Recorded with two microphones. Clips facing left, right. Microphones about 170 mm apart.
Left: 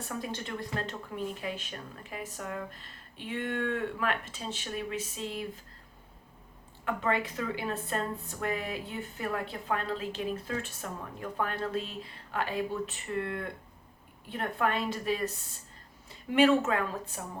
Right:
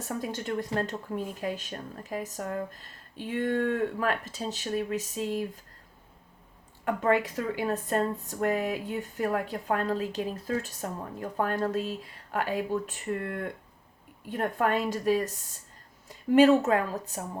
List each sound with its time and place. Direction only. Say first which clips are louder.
0.0 s speech: right 4 dB; 45° right (ahead or behind)
6.8 s a woman's voice: right 5 dB; 45° right (ahead or behind)